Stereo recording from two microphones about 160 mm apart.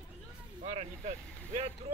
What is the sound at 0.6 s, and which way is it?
Vehicle, 45° right (ahead or behind).